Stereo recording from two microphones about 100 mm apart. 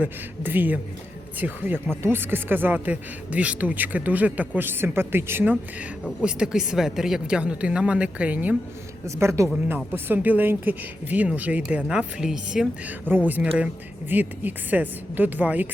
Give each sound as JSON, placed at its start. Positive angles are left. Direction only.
{"t": 0.0, "sound": "speech", "side_deg": -20}
{"t": 6.1, "sound": "a woman's voice", "side_deg": -5}
{"t": 9.0, "sound": "speech", "side_deg": -30}
{"t": 9.5, "sound": "a woman's voice", "side_deg": -20}
{"t": 13.1, "sound": "a woman's voice", "side_deg": -20}